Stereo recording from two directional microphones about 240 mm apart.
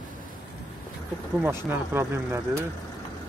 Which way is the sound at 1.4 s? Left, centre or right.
Centre.